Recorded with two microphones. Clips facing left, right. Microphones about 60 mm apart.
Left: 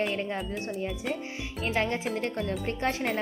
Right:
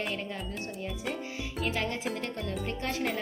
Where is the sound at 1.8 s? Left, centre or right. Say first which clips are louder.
Left 4 dB; left.